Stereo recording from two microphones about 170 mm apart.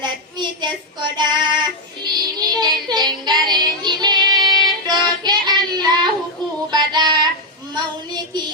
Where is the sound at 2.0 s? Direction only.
25° right (ahead or behind).